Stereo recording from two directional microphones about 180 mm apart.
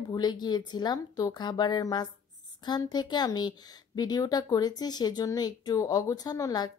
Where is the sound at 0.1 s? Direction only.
25° left (ahead or behind).